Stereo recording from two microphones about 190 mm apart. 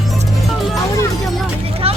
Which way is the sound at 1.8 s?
30° right (ahead or behind).